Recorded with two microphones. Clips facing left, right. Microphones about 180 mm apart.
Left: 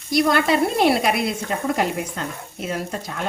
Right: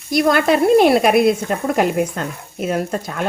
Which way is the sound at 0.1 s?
50° right (ahead or behind).